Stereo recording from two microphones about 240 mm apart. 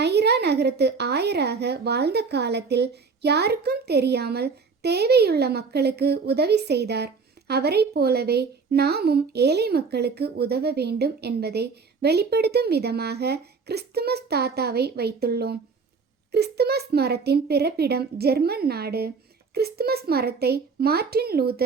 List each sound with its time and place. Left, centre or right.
0.0 s a woman's voice: right